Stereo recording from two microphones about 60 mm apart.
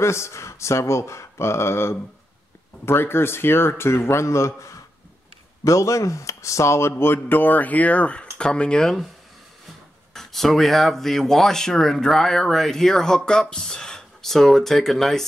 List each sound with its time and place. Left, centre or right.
0.0 s speech: left
6.9 s speech: left; by 8.9 s centre
10.1 s speech: centre